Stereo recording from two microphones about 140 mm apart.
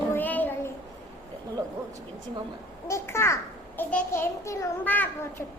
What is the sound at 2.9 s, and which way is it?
A child's voice, 20° left (ahead or behind).